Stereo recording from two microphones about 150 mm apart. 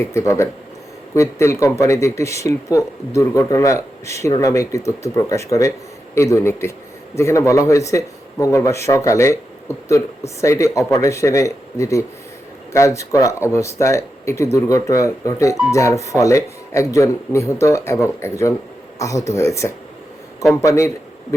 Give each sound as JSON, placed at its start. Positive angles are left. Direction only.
{"t": 0.0, "sound": "speech", "side_deg": 20}